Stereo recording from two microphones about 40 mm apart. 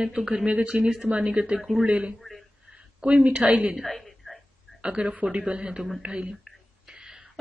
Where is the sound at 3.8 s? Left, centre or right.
Centre.